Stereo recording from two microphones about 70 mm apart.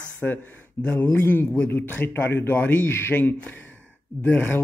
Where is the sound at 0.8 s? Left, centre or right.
Left.